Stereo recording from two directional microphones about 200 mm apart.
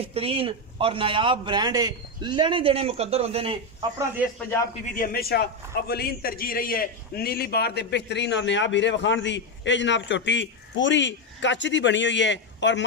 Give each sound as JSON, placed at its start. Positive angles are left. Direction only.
{"t": 0.0, "sound": "a man's voice", "side_deg": -30}
{"t": 4.9, "sound": "a man's voice", "side_deg": 50}